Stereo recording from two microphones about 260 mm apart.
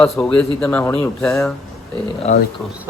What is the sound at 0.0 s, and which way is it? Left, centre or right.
Speech, centre.